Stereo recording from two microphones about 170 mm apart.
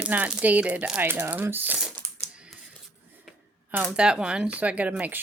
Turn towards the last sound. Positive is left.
turn(degrees=-10)  # may be behind; listen again after turning